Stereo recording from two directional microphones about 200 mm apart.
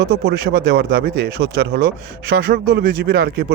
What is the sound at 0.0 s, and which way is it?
Speech, 55° right (ahead or behind).